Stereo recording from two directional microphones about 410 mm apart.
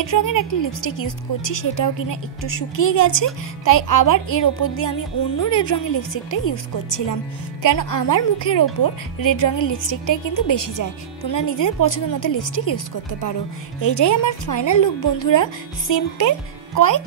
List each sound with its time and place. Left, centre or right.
0.0 s a woman's voice: left
15.9 s a woman's voice: left